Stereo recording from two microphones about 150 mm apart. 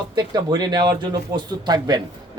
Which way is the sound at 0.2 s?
25° right (ahead or behind).